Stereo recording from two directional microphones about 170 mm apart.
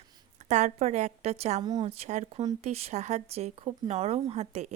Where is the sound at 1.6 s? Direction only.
25° right (ahead or behind).